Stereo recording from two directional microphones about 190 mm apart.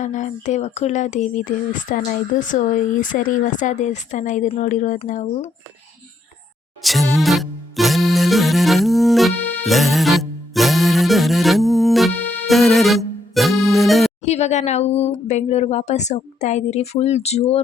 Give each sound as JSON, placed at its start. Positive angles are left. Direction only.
{"t": 0.0, "sound": "speech", "side_deg": 40}
{"t": 6.8, "sound": "music", "side_deg": 0}
{"t": 14.3, "sound": "speech", "side_deg": 35}